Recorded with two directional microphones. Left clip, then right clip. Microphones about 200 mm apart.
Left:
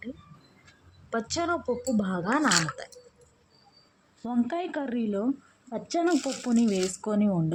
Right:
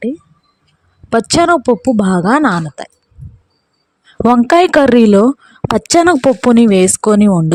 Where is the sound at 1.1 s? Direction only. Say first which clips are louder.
Right 19 dB; 50° right (ahead or behind).